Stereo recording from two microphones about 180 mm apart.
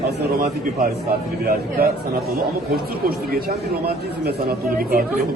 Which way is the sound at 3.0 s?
60° right (ahead or behind).